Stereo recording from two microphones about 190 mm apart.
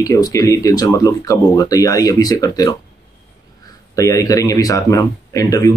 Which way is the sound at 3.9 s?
15° left (ahead or behind).